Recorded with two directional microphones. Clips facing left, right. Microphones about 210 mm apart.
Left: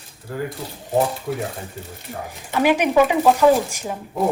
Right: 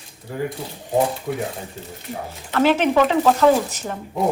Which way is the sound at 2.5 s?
15° left (ahead or behind).